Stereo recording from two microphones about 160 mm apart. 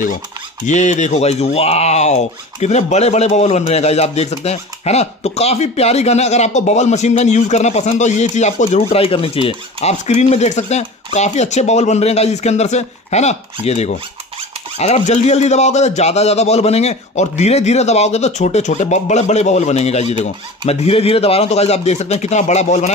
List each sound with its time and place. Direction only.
0.7 s speech: 50° left (ahead or behind)